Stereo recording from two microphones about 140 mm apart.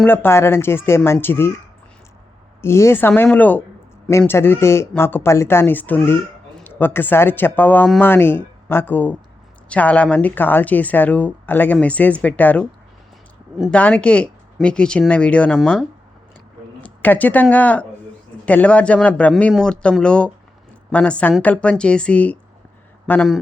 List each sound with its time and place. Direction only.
0.0 s a woman's voice: 15° left (ahead or behind)
2.6 s a woman's voice: 20° left (ahead or behind)
13.7 s a woman's voice: 10° left (ahead or behind)
16.8 s a woman's voice: 10° left (ahead or behind)